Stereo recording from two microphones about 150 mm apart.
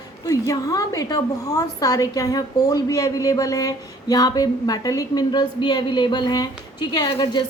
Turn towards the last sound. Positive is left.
turn(degrees=30)  # may be behind; listen again after turning